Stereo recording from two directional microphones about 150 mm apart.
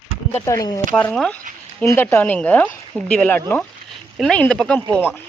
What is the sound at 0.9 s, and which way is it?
Speech, 5° left (ahead or behind).